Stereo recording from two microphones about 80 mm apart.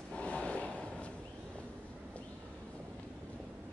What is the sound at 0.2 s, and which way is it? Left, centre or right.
Vehicle, centre.